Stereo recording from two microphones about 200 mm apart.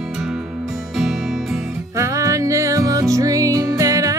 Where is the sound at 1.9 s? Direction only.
15° right (ahead or behind).